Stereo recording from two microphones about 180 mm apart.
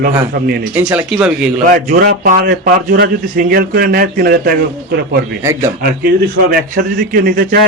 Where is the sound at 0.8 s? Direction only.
10° right (ahead or behind).